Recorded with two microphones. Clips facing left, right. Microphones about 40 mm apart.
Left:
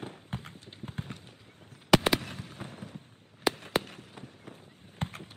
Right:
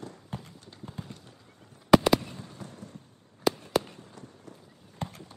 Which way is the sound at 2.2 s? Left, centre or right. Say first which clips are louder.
Left 1 dB; left.